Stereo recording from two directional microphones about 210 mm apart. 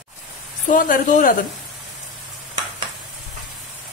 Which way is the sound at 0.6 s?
40° left (ahead or behind).